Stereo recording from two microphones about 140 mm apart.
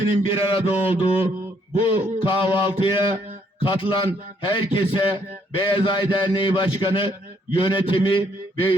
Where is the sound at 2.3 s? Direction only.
35° left (ahead or behind).